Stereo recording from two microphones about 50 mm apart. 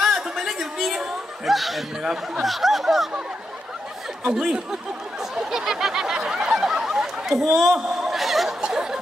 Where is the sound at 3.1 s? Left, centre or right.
Centre.